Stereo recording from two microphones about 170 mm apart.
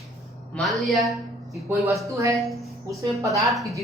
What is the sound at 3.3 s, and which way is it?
Speech, centre (ahead or behind).